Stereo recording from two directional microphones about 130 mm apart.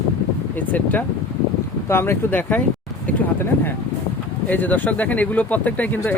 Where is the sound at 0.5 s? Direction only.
15° left (ahead or behind).